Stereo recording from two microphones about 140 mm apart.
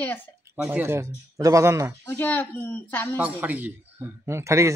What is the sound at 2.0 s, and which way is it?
A woman's voice, 15° left (ahead or behind).